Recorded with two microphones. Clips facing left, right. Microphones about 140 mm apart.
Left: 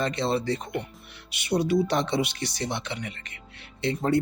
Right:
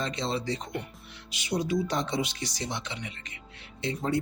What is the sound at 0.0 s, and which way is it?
Speech, 60° left (ahead or behind).